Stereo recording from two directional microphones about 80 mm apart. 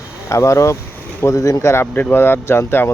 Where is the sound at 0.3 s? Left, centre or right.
Left.